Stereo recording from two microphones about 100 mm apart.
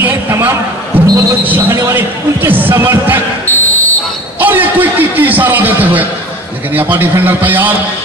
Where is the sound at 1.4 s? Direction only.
20° right (ahead or behind).